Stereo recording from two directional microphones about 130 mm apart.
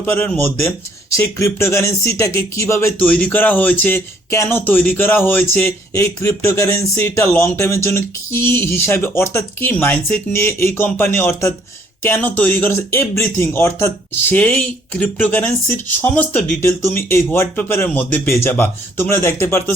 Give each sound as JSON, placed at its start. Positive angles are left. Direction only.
{"t": 0.0, "sound": "speech", "side_deg": 15}
{"t": 3.0, "sound": "speech", "side_deg": 10}